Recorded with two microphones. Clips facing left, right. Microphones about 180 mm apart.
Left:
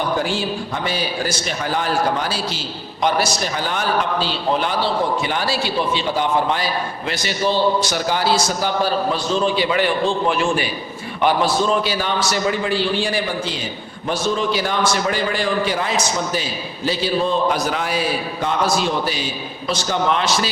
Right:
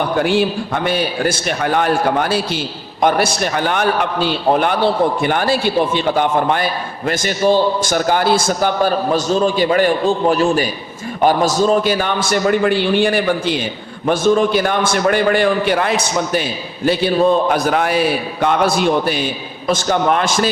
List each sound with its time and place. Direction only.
0.2 s a man's voice: 60° right (ahead or behind)